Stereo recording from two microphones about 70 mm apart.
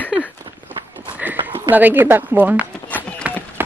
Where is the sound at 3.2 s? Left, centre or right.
Centre.